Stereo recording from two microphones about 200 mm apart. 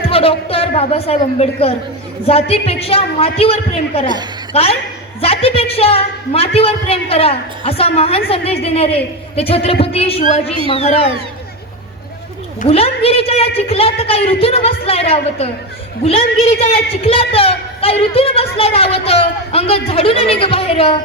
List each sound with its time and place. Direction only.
0.1 s a woman's voice: 30° left (ahead or behind)
12.6 s a woman's voice: 30° left (ahead or behind)
17.1 s a woman's voice: 30° left (ahead or behind)